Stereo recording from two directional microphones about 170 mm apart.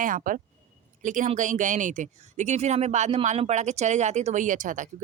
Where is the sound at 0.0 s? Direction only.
50° right (ahead or behind).